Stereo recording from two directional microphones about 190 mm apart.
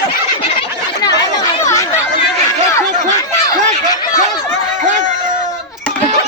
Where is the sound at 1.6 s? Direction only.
15° left (ahead or behind).